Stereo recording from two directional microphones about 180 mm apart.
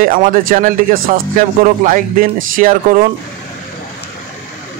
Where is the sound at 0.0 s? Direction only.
50° right (ahead or behind).